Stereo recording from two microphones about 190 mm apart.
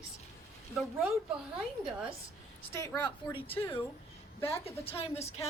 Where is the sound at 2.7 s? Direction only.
15° left (ahead or behind).